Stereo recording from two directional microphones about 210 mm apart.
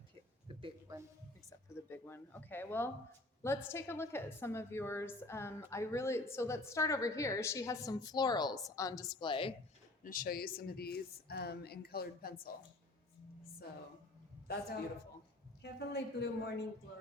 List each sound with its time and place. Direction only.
0.4 s a sound: 25° right (ahead or behind)
1.5 s a woman's voice: 10° left (ahead or behind)
10.0 s speech: 40° left (ahead or behind)
14.4 s a man's voice: 50° left (ahead or behind)